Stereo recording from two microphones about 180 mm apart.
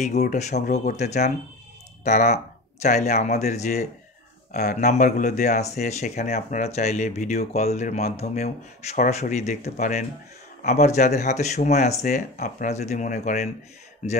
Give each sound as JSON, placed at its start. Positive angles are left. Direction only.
{"t": 0.0, "sound": "speech", "side_deg": 40}